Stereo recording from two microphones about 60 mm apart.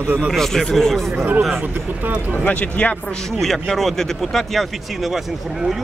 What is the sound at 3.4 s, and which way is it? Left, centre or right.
Speech, centre.